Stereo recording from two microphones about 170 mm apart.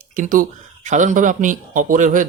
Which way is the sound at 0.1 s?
50° right (ahead or behind).